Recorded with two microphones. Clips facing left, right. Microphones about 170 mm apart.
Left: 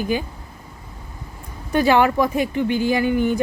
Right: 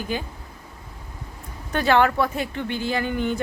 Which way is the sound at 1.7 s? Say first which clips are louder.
Left 3 dB; 10° left (ahead or behind).